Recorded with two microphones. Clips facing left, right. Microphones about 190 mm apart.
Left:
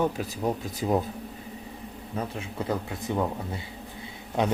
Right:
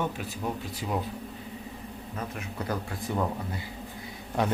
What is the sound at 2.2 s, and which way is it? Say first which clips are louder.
Speech: left 4 dB; 25° left (ahead or behind).